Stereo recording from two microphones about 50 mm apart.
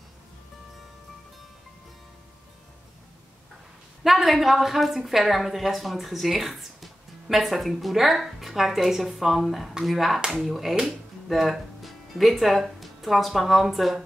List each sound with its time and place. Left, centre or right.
4.0 s a woman's voice: centre